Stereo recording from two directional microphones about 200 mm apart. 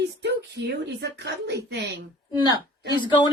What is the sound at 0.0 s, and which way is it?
A woman's voice, 60° right (ahead or behind).